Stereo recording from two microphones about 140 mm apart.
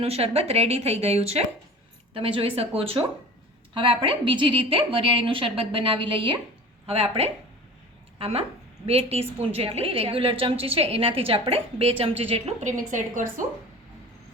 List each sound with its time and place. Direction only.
0.0 s a woman's voice: 45° right (ahead or behind)
12.5 s a woman's voice: 60° right (ahead or behind)